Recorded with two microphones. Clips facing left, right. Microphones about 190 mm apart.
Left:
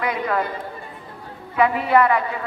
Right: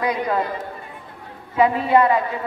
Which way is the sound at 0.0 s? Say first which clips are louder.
Right 1 dB; 20° right (ahead or behind).